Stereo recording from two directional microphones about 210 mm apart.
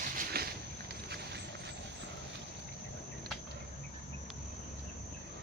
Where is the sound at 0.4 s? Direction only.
45° right (ahead or behind).